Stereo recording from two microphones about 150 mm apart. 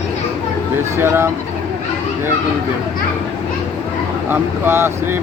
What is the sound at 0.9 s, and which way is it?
Speech, 15° right (ahead or behind).